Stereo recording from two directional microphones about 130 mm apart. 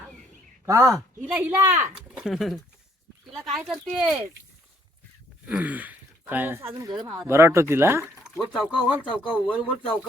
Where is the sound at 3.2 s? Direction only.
Centre (ahead or behind).